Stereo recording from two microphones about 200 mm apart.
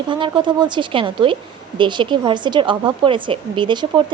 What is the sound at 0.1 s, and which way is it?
A woman's voice, 25° right (ahead or behind).